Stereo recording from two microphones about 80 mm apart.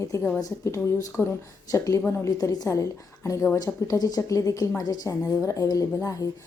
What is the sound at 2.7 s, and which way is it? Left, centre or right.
Speech, left.